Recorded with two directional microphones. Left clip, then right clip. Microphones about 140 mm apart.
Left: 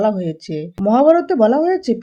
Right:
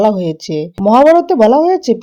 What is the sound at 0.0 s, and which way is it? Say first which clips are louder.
Speech: right 6 dB; 30° right (ahead or behind).